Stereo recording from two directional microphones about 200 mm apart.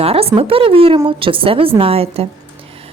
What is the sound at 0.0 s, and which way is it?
A woman's voice, 30° right (ahead or behind).